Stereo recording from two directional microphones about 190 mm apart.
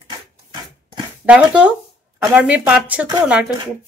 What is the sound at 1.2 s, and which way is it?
Speech, 5° right (ahead or behind).